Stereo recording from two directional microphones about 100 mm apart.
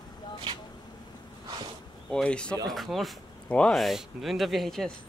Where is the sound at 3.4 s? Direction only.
10° left (ahead or behind).